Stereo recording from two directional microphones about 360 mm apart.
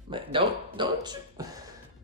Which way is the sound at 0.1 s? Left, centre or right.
Centre.